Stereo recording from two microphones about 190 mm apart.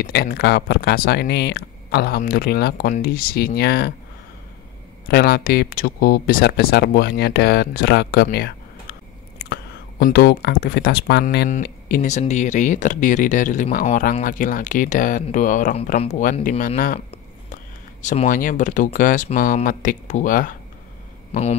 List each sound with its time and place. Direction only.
0.0 s speech: 55° left (ahead or behind)
5.0 s speech: 55° left (ahead or behind)
11.2 s speech: 45° left (ahead or behind)
18.0 s speech: 40° left (ahead or behind)
21.3 s speech: 35° left (ahead or behind)